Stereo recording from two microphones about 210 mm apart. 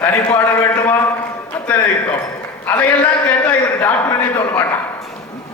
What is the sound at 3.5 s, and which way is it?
A man's voice, 10° left (ahead or behind).